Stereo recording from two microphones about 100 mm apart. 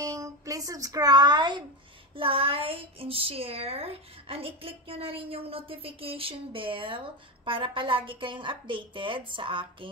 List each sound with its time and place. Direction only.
0.0 s music: 35° right (ahead or behind)
2.1 s a woman's voice: 70° right (ahead or behind)